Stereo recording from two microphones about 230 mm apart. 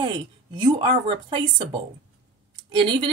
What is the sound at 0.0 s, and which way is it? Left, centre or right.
A woman's voice, centre.